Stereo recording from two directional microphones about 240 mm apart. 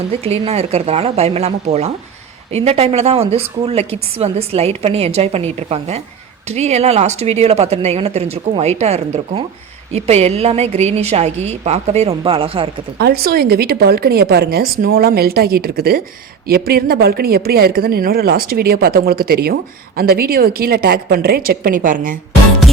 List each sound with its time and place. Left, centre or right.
0.1 s a woman's voice: right
13.0 s a woman's voice: right